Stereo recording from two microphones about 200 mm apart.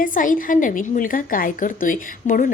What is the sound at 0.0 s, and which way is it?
A woman's voice, 40° left (ahead or behind).